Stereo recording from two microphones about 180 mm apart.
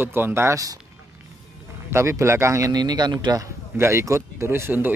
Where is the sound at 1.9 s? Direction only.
15° right (ahead or behind).